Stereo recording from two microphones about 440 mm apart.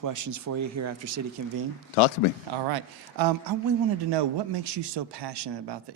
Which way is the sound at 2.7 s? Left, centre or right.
Right.